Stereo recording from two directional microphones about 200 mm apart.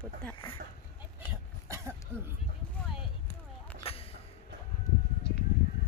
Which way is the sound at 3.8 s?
30° left (ahead or behind).